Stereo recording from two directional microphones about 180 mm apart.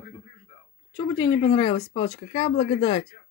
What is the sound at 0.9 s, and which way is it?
Speech, 25° left (ahead or behind).